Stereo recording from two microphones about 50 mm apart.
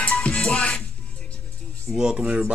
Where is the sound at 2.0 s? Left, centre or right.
Centre.